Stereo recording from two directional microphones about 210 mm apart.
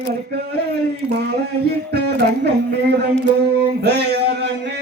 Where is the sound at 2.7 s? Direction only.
50° right (ahead or behind).